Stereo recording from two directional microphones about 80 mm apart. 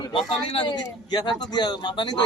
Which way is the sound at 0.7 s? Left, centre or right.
Left.